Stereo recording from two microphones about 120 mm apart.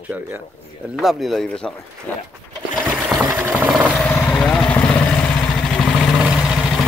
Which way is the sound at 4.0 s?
10° left (ahead or behind).